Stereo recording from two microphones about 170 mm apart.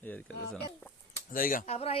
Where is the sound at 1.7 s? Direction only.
35° left (ahead or behind).